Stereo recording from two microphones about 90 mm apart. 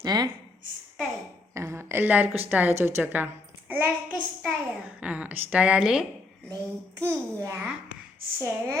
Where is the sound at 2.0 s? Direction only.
20° right (ahead or behind).